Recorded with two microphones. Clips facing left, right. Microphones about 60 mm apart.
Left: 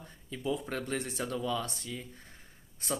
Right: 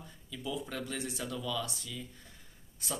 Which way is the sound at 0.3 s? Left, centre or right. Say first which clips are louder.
Left 4 dB; left.